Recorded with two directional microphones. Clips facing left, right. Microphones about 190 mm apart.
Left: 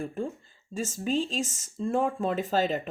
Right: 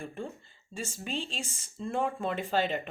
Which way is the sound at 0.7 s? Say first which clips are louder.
Left 8 dB; 45° left (ahead or behind).